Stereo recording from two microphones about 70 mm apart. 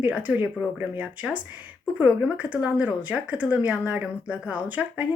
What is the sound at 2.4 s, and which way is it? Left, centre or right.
Speech, centre.